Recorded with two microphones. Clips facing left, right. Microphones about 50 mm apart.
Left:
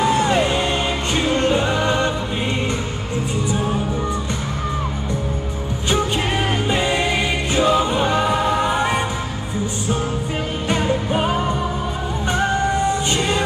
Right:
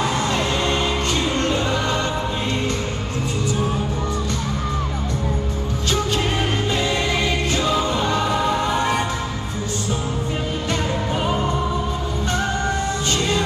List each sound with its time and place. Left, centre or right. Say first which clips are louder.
0.1 s music: left 4 dB; left
6.7 s music: left 4 dB; left
12.3 s music: left 4 dB; centre